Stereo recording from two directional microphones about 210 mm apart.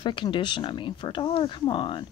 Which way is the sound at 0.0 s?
25° left (ahead or behind).